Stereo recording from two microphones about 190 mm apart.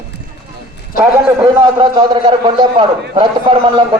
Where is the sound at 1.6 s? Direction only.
25° right (ahead or behind).